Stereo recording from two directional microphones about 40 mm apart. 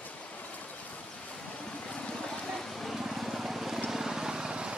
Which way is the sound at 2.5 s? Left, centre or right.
Centre.